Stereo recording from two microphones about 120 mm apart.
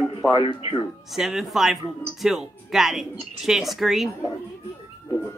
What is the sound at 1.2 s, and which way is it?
A man's voice, 5° right (ahead or behind).